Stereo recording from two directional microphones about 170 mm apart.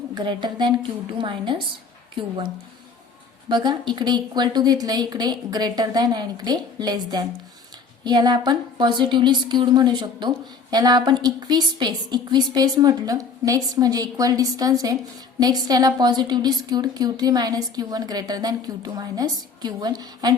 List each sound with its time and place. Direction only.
0.1 s speech: 25° right (ahead or behind)
3.5 s speech: 25° right (ahead or behind)